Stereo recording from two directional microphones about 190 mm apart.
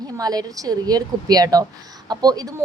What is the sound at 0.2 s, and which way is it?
Speech, 20° right (ahead or behind).